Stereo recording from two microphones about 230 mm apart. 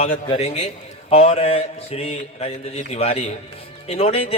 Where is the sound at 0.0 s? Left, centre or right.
Left.